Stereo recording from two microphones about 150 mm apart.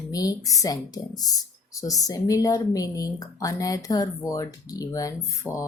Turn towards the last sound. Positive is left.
turn(degrees=20)  # may be behind; listen again after turning